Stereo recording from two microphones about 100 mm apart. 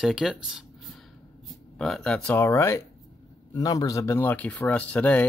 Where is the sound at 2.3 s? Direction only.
25° left (ahead or behind).